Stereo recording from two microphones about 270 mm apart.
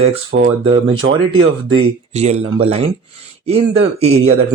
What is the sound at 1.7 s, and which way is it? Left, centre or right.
Speech, right.